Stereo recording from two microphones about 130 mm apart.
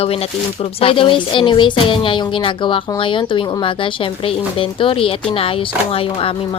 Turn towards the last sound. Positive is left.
turn(degrees=45)  # may be behind; listen again after turning